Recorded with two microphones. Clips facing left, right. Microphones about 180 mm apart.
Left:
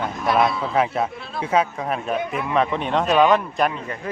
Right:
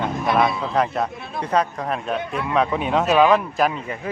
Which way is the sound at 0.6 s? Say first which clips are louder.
Even; 5° left (ahead or behind).